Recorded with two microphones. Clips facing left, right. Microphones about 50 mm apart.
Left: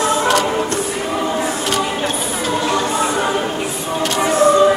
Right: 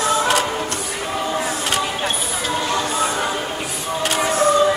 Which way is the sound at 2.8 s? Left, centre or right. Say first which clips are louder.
Left 3 dB; left.